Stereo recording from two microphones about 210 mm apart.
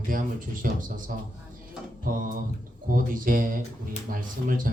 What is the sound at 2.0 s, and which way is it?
Mantra, 40° right (ahead or behind).